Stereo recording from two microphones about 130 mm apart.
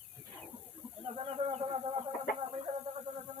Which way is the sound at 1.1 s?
45° right (ahead or behind).